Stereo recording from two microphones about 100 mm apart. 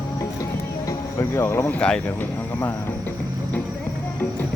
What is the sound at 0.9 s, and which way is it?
Music, 25° left (ahead or behind).